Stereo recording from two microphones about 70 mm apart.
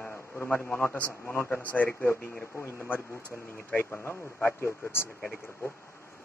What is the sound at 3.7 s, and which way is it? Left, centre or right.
Speech, left.